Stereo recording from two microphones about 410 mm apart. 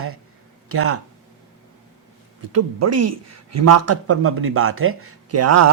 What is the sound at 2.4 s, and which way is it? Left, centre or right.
Speech, right.